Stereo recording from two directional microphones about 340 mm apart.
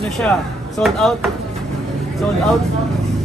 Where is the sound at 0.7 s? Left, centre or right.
Centre.